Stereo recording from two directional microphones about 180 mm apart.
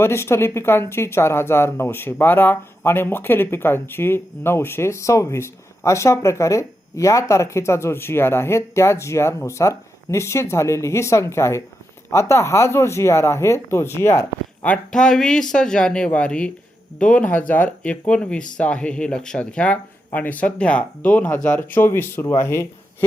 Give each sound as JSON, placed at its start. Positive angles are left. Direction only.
{"t": 0.0, "sound": "speech", "side_deg": 15}